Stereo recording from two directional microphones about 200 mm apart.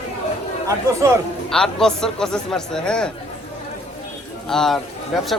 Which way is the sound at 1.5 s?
5° left (ahead or behind).